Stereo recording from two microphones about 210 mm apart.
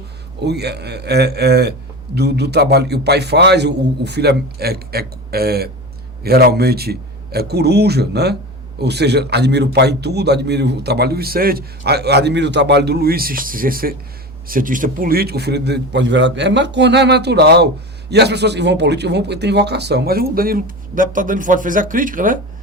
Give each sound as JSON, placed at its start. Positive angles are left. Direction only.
{"t": 0.4, "sound": "a man's voice", "side_deg": -50}